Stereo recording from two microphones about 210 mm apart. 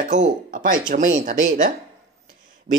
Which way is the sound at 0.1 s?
40° right (ahead or behind).